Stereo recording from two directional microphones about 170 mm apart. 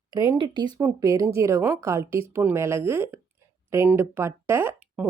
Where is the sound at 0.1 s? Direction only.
20° right (ahead or behind).